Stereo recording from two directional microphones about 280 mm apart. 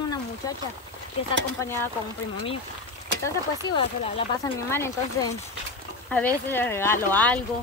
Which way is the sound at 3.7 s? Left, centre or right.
Centre.